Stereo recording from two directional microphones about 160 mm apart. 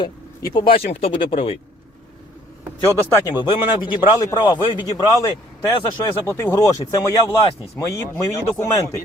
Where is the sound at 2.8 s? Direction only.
20° left (ahead or behind).